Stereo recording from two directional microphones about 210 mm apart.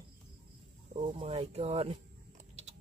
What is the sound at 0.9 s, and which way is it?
Speech, 25° right (ahead or behind).